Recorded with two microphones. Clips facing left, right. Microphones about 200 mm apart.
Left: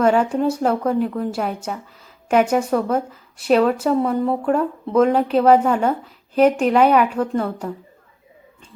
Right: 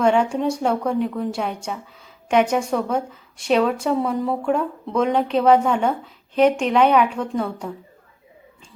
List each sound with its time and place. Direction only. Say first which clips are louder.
0.0 s speech: left 2 dB; 5° left (ahead or behind)